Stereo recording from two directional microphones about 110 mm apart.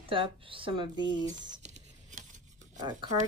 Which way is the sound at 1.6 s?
90° right.